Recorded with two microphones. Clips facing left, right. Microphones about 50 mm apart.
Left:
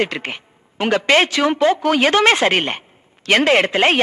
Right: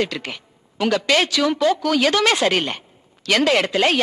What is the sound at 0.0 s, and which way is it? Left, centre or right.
A woman's voice, left.